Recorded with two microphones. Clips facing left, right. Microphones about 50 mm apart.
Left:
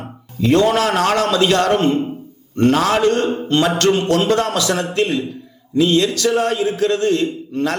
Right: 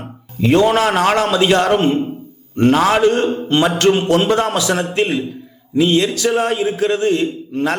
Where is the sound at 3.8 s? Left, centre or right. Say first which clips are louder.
Right 2 dB; centre.